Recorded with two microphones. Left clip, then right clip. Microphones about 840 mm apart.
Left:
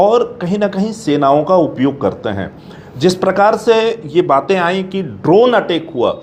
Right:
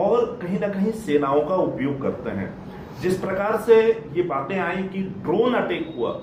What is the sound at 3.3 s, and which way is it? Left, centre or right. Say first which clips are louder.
A man's voice: left 4 dB; left.